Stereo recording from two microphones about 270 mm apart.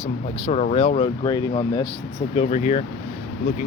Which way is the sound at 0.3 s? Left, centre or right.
Left.